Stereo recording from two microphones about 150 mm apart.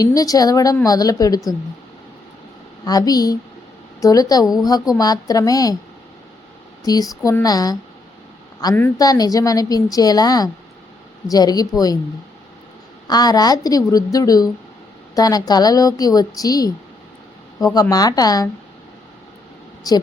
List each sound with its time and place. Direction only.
0.0 s a woman's voice: 25° left (ahead or behind)
2.8 s a woman's voice: 25° left (ahead or behind)
6.8 s a woman's voice: 25° left (ahead or behind)
13.1 s a woman's voice: 25° left (ahead or behind)
17.7 s a woman's voice: 25° left (ahead or behind)
19.9 s a woman's voice: 25° left (ahead or behind)